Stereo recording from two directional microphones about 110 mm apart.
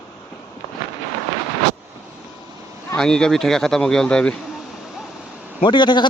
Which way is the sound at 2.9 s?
5° left (ahead or behind).